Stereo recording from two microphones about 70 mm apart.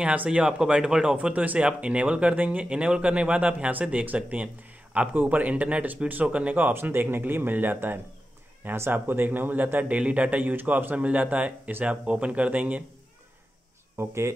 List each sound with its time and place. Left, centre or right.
0.0 s speech: centre
6.7 s speech: right
13.9 s speech: right